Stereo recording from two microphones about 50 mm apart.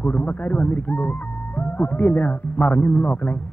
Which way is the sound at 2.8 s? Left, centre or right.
Left.